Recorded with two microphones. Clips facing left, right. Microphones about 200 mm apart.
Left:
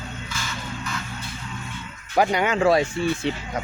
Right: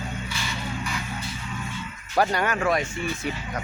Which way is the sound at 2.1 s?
15° left (ahead or behind).